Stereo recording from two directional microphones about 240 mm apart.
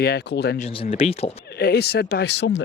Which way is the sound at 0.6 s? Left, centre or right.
Left.